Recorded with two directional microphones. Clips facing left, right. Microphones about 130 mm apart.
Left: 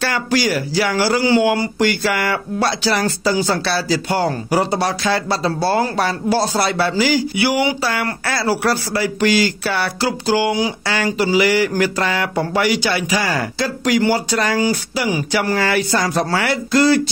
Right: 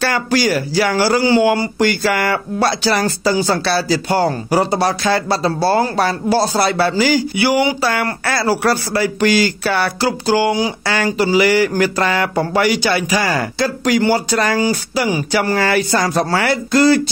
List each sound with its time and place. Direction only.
0.0 s speech: 45° right (ahead or behind)
1.2 s speech: 35° right (ahead or behind)